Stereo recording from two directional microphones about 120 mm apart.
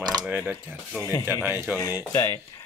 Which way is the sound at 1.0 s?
30° left (ahead or behind).